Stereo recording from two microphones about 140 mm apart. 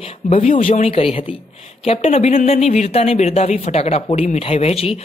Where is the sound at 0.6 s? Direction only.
45° left (ahead or behind).